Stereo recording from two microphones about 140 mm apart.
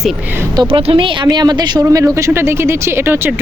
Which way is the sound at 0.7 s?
40° right (ahead or behind).